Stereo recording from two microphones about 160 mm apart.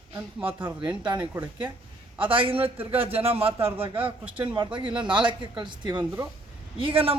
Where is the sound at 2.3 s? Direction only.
35° right (ahead or behind).